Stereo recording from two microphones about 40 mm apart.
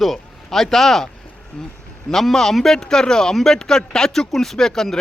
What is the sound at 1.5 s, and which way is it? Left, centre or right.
Speech, left.